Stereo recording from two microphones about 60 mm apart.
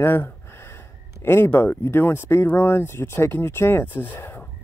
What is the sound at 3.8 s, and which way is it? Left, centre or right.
Speech, left.